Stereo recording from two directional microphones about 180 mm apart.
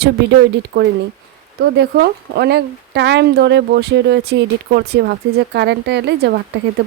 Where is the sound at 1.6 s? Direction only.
65° right (ahead or behind).